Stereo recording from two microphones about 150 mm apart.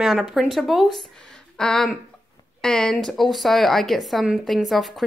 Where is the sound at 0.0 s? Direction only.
Centre (ahead or behind).